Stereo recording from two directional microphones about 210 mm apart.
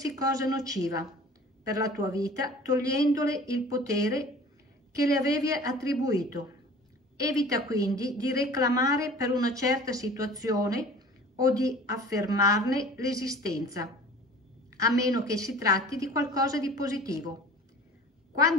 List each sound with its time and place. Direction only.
0.0 s a woman's voice: 15° right (ahead or behind)